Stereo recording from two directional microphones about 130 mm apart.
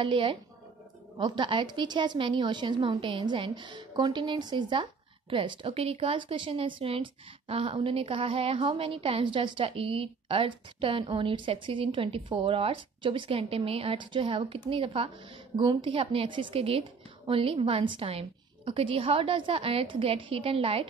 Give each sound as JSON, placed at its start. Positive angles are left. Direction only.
{"t": 0.0, "sound": "a woman's voice", "side_deg": -40}